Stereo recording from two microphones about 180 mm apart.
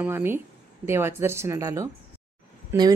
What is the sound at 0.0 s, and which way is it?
Speech, 10° right (ahead or behind).